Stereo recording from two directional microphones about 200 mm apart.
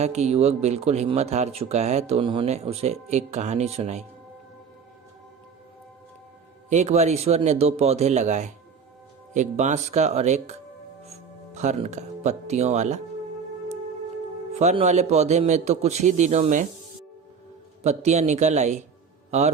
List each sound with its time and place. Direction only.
0.0 s speech: 35° right (ahead or behind)
6.7 s speech: 35° right (ahead or behind)
14.6 s speech: 35° right (ahead or behind)
17.8 s speech: 35° right (ahead or behind)